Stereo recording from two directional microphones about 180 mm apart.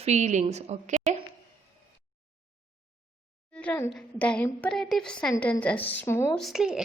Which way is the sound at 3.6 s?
10° left (ahead or behind).